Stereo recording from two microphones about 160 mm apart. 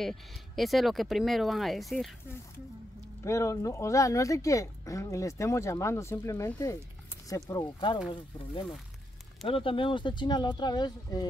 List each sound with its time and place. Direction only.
0.0 s speech: centre (ahead or behind)
3.3 s speech: 20° left (ahead or behind)
9.5 s speech: 35° left (ahead or behind)